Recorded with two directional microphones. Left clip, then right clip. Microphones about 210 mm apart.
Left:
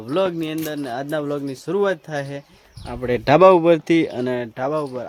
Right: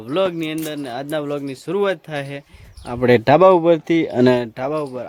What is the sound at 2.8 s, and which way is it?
Speech, 45° right (ahead or behind).